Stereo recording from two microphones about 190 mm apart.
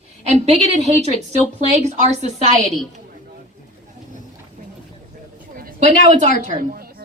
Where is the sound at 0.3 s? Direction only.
35° right (ahead or behind).